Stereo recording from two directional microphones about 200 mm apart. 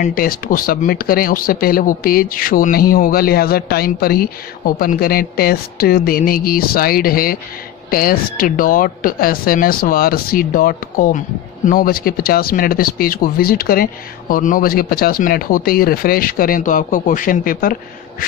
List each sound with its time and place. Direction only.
0.0 s speech: 45° left (ahead or behind)